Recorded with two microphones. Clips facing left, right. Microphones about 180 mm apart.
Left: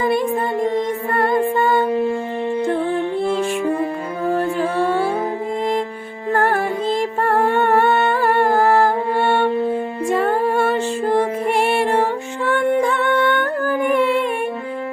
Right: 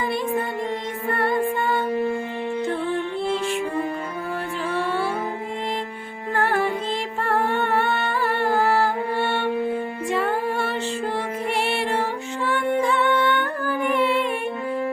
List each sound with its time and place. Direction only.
4.3 s music: 45° left (ahead or behind)
6.3 s music: 45° left (ahead or behind)
7.2 s humming: 45° left (ahead or behind)
10.1 s music: 45° left (ahead or behind)